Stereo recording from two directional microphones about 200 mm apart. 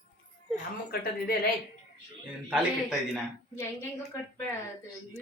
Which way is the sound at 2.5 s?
5° right (ahead or behind).